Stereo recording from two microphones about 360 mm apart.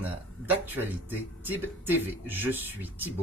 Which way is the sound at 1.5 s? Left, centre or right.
Centre.